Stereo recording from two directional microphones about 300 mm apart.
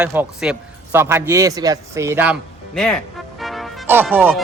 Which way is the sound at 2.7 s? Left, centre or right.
Centre.